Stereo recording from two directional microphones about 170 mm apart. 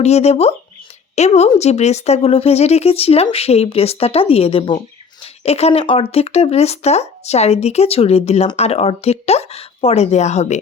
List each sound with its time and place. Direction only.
0.0 s speech: 40° left (ahead or behind)